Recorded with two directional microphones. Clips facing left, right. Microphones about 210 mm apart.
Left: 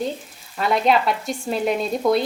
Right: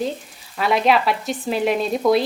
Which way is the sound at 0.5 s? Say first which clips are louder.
Right 1 dB; centre (ahead or behind).